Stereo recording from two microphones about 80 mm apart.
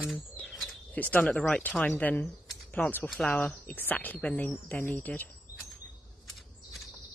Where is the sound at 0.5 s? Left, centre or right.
Centre.